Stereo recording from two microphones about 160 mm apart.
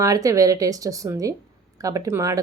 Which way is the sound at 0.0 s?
20° right (ahead or behind).